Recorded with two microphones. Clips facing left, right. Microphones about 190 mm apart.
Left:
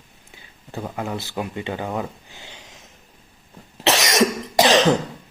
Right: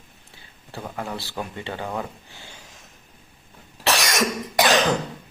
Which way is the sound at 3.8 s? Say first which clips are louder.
Left 4 dB; 20° left (ahead or behind).